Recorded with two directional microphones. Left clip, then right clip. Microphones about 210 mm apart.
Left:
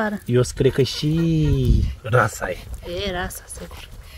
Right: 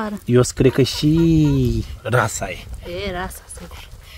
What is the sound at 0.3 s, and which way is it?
Speech, 45° right (ahead or behind).